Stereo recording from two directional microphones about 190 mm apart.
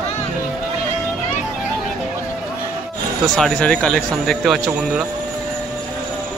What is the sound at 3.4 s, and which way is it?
Speech, 5° left (ahead or behind).